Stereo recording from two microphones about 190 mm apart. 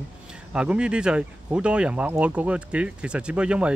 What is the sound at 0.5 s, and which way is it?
Speech, 5° right (ahead or behind).